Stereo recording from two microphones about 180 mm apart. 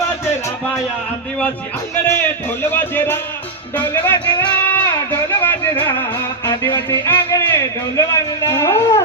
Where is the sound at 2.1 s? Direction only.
15° left (ahead or behind).